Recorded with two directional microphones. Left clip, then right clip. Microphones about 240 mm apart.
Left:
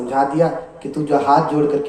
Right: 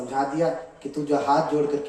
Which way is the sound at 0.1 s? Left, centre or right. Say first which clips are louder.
Left 7 dB; left.